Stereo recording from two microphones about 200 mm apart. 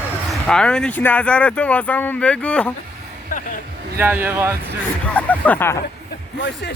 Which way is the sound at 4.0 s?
10° right (ahead or behind).